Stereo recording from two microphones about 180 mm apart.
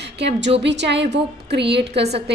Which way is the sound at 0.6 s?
75° right (ahead or behind).